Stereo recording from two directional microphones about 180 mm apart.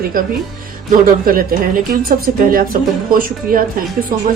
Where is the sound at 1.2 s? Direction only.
50° right (ahead or behind).